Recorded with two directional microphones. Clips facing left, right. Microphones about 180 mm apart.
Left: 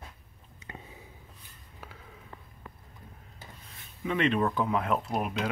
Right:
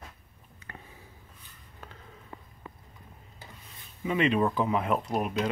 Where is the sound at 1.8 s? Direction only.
5° left (ahead or behind).